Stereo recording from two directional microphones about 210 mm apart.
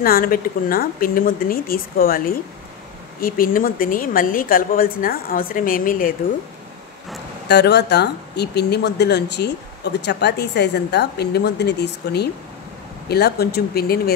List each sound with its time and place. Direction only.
0.0 s speech: 45° left (ahead or behind)
7.4 s speech: 55° left (ahead or behind)